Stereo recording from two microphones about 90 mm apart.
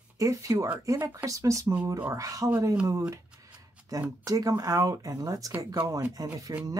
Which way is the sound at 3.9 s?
40° right (ahead or behind).